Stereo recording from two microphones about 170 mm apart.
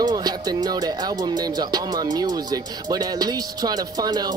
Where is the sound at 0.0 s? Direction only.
20° right (ahead or behind).